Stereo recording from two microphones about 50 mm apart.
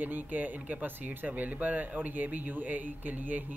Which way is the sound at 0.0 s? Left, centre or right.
Right.